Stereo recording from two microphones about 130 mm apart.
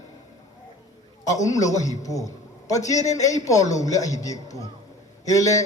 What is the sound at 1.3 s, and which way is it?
A man's voice, 25° left (ahead or behind).